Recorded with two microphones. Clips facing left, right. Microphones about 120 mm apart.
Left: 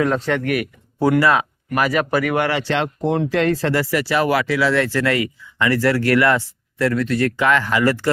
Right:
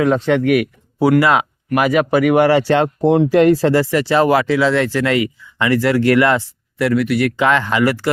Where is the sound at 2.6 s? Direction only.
40° right (ahead or behind).